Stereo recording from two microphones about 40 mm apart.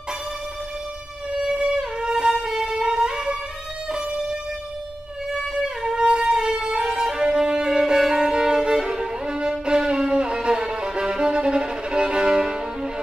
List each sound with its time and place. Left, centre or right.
1.4 s music: right
5.6 s music: centre
8.0 s violin: centre